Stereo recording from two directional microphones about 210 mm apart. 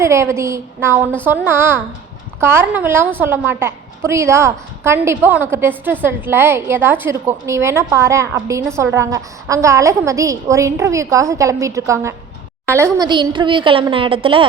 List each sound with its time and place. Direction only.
0.0 s a woman's voice: 10° right (ahead or behind)